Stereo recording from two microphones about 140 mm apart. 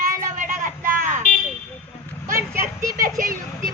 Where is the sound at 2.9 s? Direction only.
90° right.